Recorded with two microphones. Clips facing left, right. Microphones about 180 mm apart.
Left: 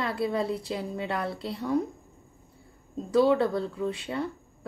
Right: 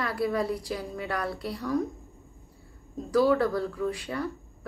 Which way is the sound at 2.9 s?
25° left (ahead or behind).